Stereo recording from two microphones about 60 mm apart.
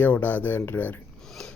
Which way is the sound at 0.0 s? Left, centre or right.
Left.